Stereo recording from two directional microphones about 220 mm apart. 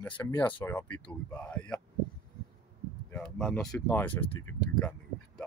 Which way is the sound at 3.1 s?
5° left (ahead or behind).